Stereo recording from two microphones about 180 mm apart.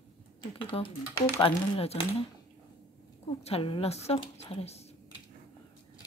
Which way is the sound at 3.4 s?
30° left (ahead or behind).